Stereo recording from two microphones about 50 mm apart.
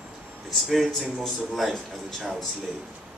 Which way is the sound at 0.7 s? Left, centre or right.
Centre.